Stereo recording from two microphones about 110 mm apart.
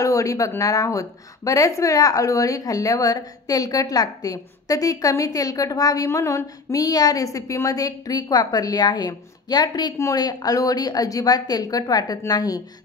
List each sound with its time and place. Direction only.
0.0 s a woman's voice: 30° left (ahead or behind)